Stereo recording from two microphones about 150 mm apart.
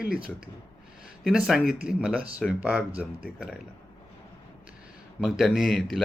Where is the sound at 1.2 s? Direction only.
5° right (ahead or behind).